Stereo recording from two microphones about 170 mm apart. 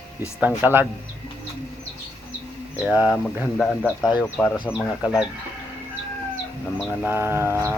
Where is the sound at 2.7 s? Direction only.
10° right (ahead or behind).